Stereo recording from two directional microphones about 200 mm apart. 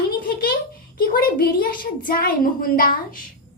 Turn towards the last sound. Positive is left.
turn(degrees=45)  # may be behind; listen again after turning